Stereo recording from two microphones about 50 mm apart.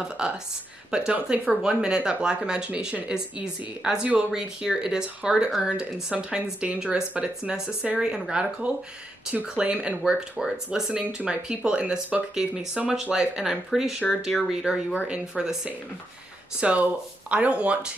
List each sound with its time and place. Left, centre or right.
0.2 s speech: centre
6.6 s speech: right